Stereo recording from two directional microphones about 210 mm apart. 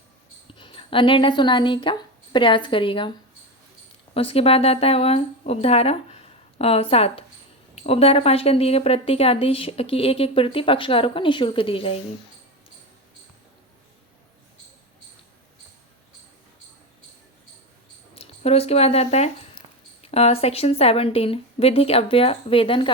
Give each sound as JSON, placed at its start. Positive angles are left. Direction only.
{"t": 0.6, "sound": "a woman's voice", "side_deg": 25}
{"t": 4.1, "sound": "a woman's voice", "side_deg": 30}
{"t": 18.1, "sound": "a woman's voice", "side_deg": 30}